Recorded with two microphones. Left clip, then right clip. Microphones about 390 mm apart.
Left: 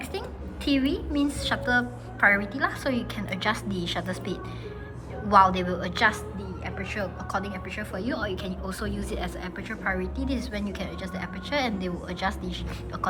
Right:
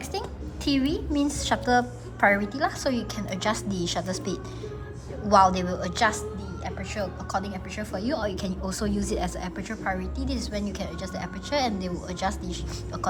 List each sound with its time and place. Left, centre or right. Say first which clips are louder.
0.1 s a woman's voice: right 2 dB; centre